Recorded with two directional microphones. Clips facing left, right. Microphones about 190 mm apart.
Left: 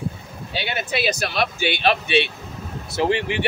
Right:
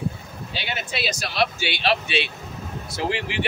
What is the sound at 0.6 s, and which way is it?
Speech, 55° left (ahead or behind).